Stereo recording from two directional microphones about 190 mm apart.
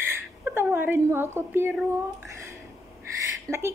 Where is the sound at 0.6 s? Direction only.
10° right (ahead or behind).